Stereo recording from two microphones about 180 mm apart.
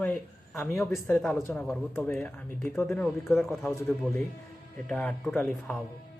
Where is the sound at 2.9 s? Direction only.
Centre (ahead or behind).